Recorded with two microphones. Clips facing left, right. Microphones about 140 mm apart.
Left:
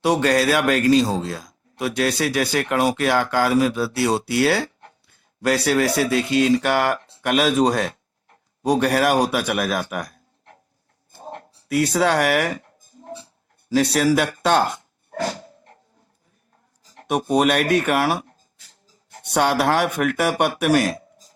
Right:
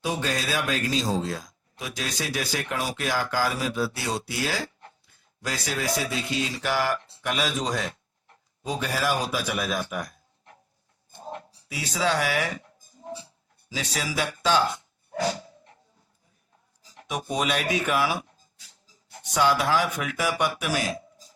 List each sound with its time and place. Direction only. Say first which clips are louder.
0.0 s a man's voice: left 10 dB; 75° left (ahead or behind)
13.7 s a man's voice: left 14 dB; 65° left (ahead or behind)
15.1 s dog: left 1 dB; 55° left (ahead or behind)
16.9 s a man's voice: left 10 dB; 60° left (ahead or behind)